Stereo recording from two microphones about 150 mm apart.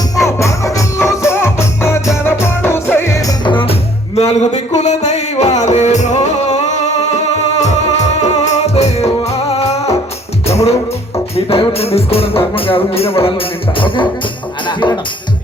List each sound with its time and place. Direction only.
0.3 s music: 20° left (ahead or behind); by 6.6 s 45° left (ahead or behind)
8.2 s music: 45° left (ahead or behind)
14.7 s speech: 30° left (ahead or behind)